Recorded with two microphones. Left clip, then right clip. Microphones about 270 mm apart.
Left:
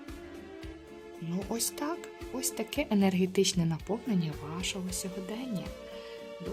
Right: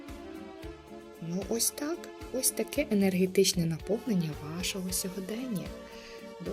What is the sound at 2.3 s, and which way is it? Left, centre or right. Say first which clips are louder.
A woman's voice: right 3 dB; centre.